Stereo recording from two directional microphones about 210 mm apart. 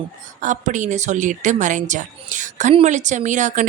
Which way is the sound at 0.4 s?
35° right (ahead or behind).